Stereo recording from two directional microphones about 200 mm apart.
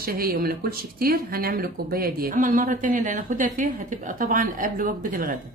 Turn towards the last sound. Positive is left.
turn(degrees=-45)  # may be behind; listen again after turning